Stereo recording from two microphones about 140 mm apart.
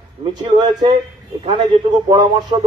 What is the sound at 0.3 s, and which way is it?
A man's voice, 35° right (ahead or behind).